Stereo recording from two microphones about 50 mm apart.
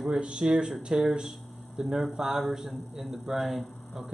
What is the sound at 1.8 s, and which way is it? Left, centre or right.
A man's voice, centre.